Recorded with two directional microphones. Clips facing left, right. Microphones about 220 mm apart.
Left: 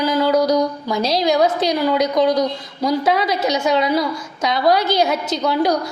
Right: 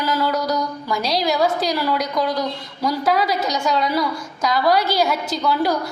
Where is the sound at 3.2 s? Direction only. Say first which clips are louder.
Left 2 dB; centre (ahead or behind).